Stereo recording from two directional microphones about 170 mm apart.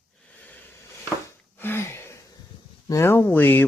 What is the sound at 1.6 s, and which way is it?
Gasp, 15° left (ahead or behind).